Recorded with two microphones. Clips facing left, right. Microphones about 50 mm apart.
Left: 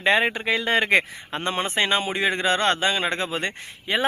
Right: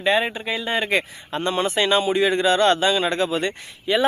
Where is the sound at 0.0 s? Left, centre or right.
Left.